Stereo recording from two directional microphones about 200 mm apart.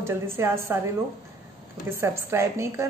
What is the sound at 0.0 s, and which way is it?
Speech, 10° right (ahead or behind).